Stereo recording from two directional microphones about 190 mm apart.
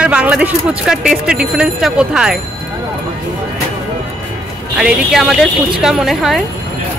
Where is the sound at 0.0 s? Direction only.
5° right (ahead or behind).